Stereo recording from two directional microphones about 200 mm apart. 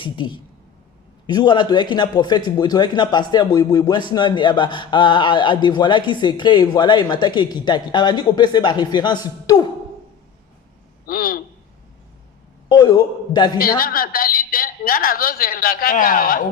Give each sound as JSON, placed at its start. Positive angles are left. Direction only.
{"t": 0.0, "sound": "speech", "side_deg": 25}
{"t": 11.0, "sound": "a sound", "side_deg": 45}
{"t": 12.6, "sound": "speech", "side_deg": 20}
{"t": 13.6, "sound": "a woman's voice", "side_deg": 45}